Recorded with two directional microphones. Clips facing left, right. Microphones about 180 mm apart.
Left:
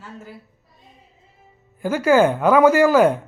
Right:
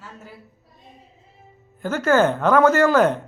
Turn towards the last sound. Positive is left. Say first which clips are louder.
# left 2 dB
turn(degrees=10)  # may be behind; listen again after turning